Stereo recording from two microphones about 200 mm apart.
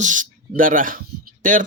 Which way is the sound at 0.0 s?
40° right (ahead or behind).